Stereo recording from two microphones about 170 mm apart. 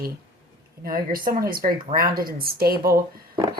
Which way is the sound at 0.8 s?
60° right (ahead or behind).